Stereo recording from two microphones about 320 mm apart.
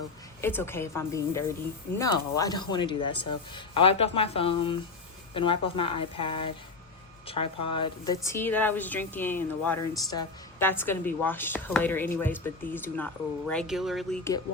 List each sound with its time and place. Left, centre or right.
0.4 s a woman's voice: centre